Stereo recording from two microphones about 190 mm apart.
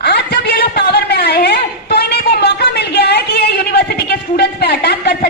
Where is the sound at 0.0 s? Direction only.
60° left (ahead or behind).